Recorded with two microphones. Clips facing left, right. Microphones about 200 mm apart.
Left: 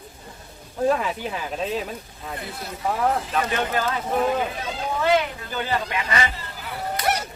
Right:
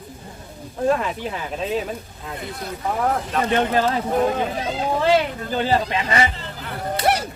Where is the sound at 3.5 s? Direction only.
30° right (ahead or behind).